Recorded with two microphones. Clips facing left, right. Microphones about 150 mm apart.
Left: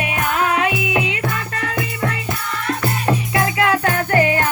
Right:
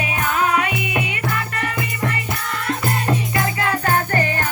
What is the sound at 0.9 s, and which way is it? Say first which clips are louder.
Music: left 3 dB; 90° left.